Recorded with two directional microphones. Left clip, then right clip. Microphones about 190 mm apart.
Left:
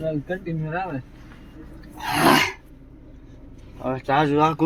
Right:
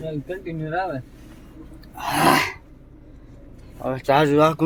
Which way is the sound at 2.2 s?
10° left (ahead or behind).